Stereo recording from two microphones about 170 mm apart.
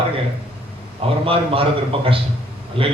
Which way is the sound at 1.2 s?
35° right (ahead or behind).